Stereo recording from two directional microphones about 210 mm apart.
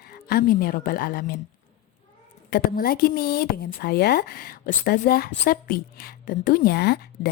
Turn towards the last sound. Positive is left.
turn(degrees=50)  # may be behind; listen again after turning